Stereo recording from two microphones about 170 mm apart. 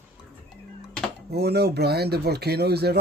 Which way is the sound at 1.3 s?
70° right (ahead or behind).